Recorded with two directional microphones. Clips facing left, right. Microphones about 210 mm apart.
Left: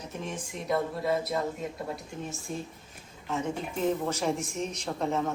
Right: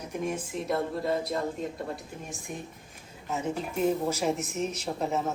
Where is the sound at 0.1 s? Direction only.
10° right (ahead or behind).